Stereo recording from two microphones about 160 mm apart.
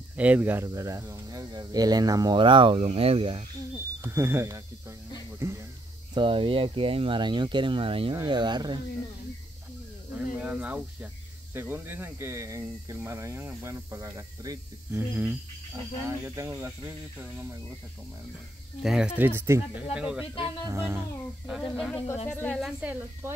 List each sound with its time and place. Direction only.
0.1 s speech: 10° right (ahead or behind); by 3.4 s 35° right (ahead or behind)
4.0 s speech: 15° right (ahead or behind)
5.4 s a sound: 15° right (ahead or behind)
6.1 s speech: 35° right (ahead or behind)
10.1 s speech: 10° right (ahead or behind)
18.8 s speech: 5° right (ahead or behind)
19.9 s speech: 5° right (ahead or behind)
20.6 s speech: 15° right (ahead or behind)
21.5 s a woman's voice: centre (ahead or behind)
22.8 s speech: 10° right (ahead or behind)